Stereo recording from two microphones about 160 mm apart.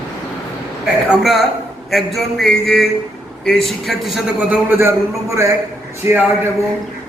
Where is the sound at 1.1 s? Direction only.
Centre (ahead or behind).